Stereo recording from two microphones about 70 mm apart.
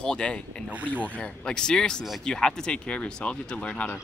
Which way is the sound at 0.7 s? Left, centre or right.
Right.